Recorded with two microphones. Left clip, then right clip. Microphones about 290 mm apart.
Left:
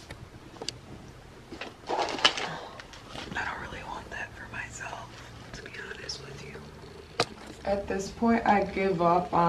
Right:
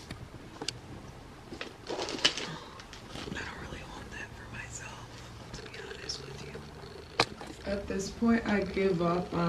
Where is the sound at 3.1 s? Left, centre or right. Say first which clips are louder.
Left 6 dB; centre.